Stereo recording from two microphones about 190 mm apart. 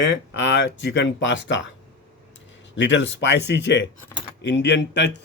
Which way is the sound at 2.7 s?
75° left (ahead or behind).